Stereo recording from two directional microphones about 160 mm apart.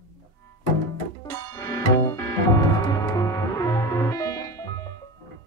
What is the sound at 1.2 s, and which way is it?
Music, 20° left (ahead or behind).